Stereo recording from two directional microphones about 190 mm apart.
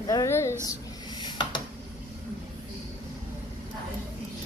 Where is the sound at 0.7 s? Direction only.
20° left (ahead or behind).